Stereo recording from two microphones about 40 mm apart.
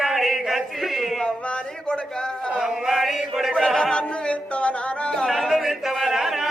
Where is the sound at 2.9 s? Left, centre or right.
Centre.